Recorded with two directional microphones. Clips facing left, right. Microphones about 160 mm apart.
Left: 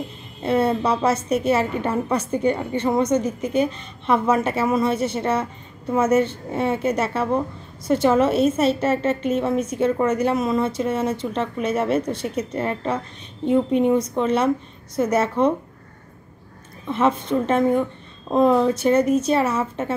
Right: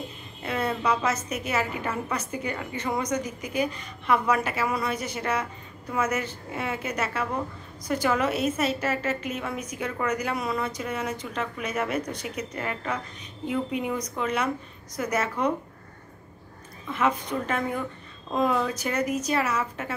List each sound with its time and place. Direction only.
0.4 s a woman's voice: 30° left (ahead or behind)
16.8 s a woman's voice: 25° left (ahead or behind)